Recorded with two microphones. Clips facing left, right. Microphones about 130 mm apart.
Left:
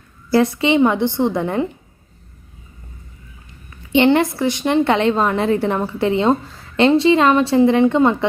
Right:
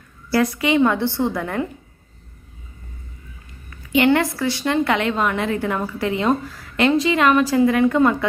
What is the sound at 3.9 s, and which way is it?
A woman's voice, 25° left (ahead or behind).